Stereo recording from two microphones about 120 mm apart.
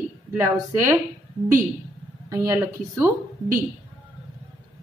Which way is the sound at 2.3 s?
25° right (ahead or behind).